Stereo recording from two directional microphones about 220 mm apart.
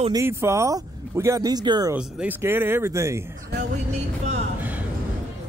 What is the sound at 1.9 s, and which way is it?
Speech, 5° right (ahead or behind).